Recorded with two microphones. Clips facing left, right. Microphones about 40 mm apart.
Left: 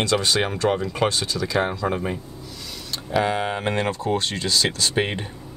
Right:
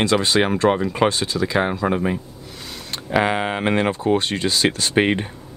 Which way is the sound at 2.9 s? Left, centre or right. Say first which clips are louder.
Right 3 dB; right.